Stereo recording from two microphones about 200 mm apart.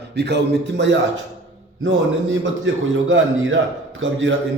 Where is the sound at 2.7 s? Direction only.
70° right (ahead or behind).